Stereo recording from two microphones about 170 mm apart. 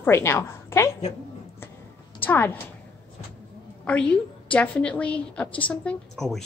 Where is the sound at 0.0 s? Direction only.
15° left (ahead or behind).